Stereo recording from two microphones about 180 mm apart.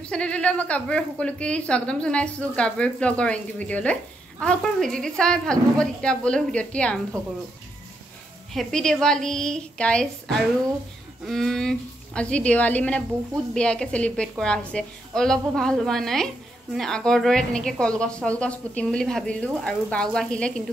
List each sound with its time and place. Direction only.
0.0 s a woman's voice: 5° left (ahead or behind)
8.5 s a woman's voice: centre (ahead or behind)
11.2 s a woman's voice: centre (ahead or behind)